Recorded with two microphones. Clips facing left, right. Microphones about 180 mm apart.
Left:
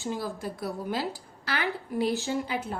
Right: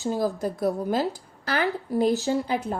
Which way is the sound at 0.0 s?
40° right (ahead or behind).